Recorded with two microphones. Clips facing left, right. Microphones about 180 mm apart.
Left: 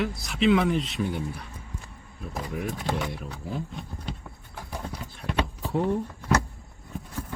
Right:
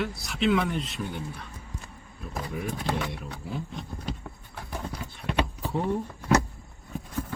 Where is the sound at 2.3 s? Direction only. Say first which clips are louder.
Left 1 dB; centre (ahead or behind).